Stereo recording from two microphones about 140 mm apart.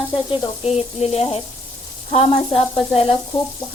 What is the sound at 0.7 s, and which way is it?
Speech, 50° left (ahead or behind).